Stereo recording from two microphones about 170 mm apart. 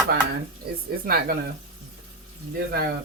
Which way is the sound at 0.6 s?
65° right (ahead or behind).